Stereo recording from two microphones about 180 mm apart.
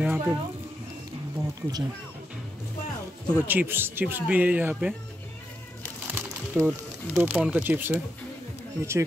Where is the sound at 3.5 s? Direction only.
10° right (ahead or behind).